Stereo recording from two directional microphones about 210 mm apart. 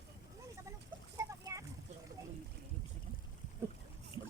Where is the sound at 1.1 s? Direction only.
15° right (ahead or behind).